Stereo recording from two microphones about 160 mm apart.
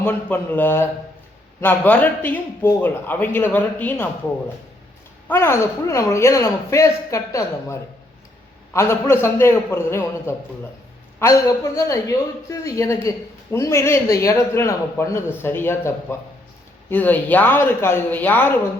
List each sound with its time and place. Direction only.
0.0 s a man's voice: 10° left (ahead or behind)
5.3 s a man's voice: 15° left (ahead or behind)